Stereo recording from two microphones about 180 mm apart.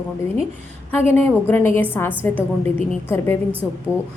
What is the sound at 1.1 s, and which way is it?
A woman's voice, 10° left (ahead or behind).